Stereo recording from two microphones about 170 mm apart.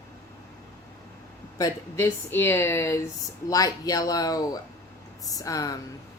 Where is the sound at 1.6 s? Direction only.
20° left (ahead or behind).